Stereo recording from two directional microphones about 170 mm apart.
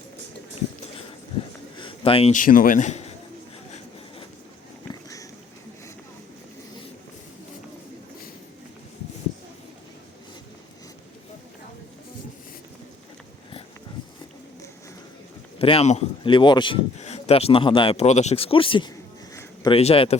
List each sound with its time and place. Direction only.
1.8 s a sound: 30° left (ahead or behind)
2.3 s speech: 55° left (ahead or behind)
15.5 s speech: 35° left (ahead or behind)
17.0 s speech: 40° left (ahead or behind)
19.3 s a sound: 20° left (ahead or behind)
19.7 s speech: 35° left (ahead or behind)